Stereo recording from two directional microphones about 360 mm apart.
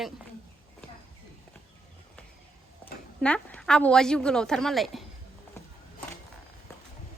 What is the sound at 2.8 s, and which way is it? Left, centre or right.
Speech, centre.